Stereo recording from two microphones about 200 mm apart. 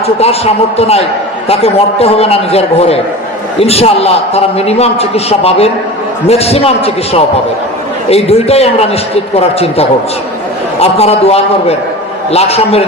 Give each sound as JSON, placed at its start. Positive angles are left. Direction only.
{"t": 0.2, "sound": "a man's voice", "side_deg": 30}